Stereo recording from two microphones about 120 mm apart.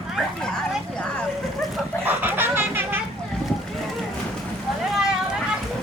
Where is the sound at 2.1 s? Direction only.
15° right (ahead or behind).